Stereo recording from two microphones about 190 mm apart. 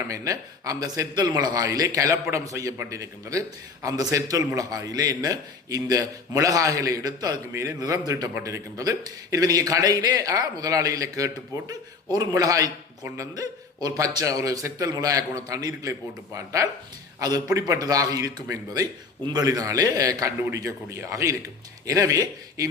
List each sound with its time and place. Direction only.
0.1 s a man's voice: 15° right (ahead or behind)